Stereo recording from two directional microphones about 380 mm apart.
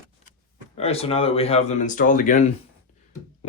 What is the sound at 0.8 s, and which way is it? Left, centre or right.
Speech, centre.